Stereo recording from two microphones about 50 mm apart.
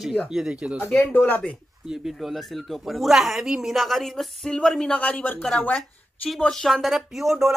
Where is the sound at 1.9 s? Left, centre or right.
Centre.